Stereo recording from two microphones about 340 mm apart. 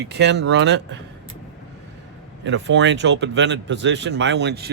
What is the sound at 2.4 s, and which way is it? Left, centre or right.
Speech, right.